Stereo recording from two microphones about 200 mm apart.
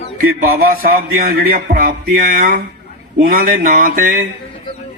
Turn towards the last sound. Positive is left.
turn(degrees=-45)  # may be behind; listen again after turning